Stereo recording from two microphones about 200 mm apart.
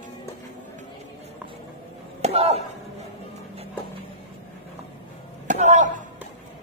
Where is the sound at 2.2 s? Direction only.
30° right (ahead or behind).